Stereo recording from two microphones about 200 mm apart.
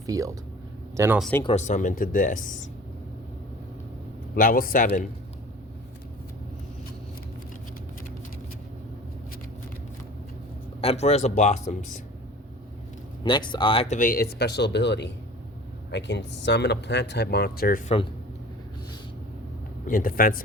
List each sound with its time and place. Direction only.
0.1 s speech: 15° right (ahead or behind)
1.5 s speech: 35° left (ahead or behind)
4.4 s speech: 45° left (ahead or behind)
10.8 s speech: 30° left (ahead or behind)
13.2 s speech: 20° left (ahead or behind); by 17.9 s 45° left (ahead or behind)
19.9 s speech: 45° left (ahead or behind)